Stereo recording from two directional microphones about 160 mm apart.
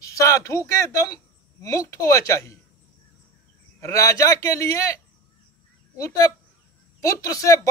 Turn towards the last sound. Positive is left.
turn(degrees=20)  # may be behind; listen again after turning